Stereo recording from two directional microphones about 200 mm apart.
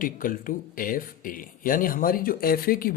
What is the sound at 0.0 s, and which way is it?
Speech, 45° left (ahead or behind).